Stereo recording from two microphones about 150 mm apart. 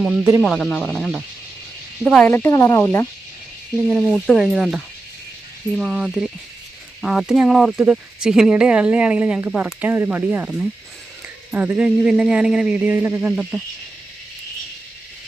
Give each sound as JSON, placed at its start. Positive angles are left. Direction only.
{"t": 0.0, "sound": "speech", "side_deg": 0}
{"t": 3.8, "sound": "speech", "side_deg": 5}